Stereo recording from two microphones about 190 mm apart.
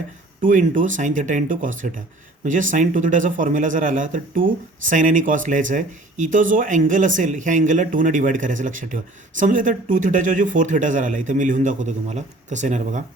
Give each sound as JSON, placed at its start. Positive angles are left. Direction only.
{"t": 0.4, "sound": "speech", "side_deg": -45}